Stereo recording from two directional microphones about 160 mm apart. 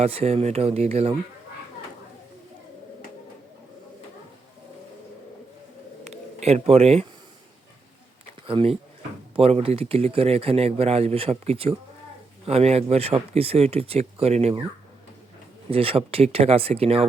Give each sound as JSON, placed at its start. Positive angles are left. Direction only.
{"t": 0.0, "sound": "speech", "side_deg": -40}
{"t": 6.1, "sound": "speech", "side_deg": -40}
{"t": 8.4, "sound": "speech", "side_deg": -35}
{"t": 15.7, "sound": "speech", "side_deg": -35}